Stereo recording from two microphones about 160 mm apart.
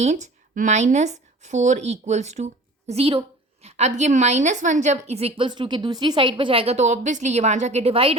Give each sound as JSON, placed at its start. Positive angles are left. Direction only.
{"t": 0.0, "sound": "a woman's voice", "side_deg": -45}